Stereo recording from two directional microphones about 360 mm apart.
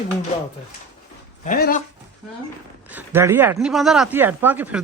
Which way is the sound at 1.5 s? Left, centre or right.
Left.